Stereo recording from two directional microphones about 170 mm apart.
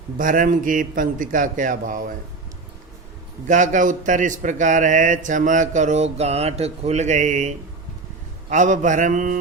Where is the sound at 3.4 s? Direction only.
50° right (ahead or behind).